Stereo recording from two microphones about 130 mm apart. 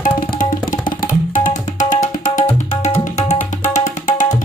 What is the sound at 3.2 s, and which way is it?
Tabla, 15° left (ahead or behind).